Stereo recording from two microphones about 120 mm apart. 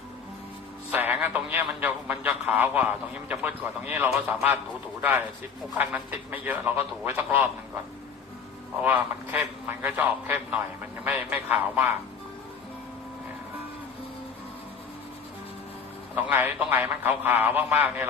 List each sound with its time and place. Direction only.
0.9 s a man's voice: 15° right (ahead or behind)
8.8 s a man's voice: 15° right (ahead or behind)
16.1 s a man's voice: 10° right (ahead or behind)